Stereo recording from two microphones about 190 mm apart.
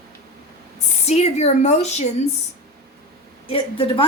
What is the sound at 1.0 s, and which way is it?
A woman's voice, 35° left (ahead or behind).